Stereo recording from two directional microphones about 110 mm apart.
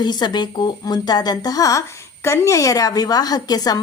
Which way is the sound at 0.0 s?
40° left (ahead or behind).